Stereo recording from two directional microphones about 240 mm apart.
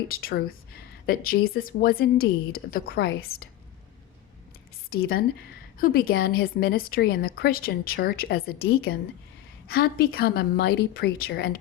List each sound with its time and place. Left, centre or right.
0.1 s a woman's voice: left
4.9 s a woman's voice: left